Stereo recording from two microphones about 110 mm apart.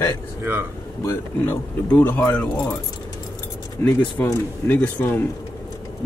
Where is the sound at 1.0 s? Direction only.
20° left (ahead or behind).